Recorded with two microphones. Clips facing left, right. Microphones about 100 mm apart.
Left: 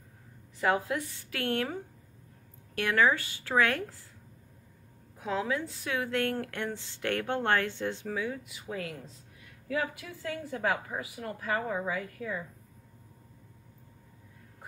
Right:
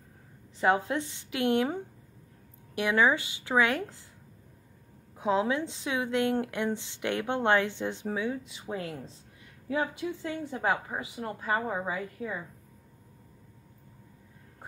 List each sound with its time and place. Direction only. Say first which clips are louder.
0.6 s a woman's voice: right 2 dB; 25° right (ahead or behind)
5.1 s a woman's voice: right 5 dB; 20° right (ahead or behind)